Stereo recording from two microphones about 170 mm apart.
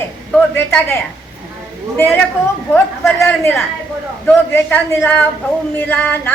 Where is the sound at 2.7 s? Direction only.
10° left (ahead or behind).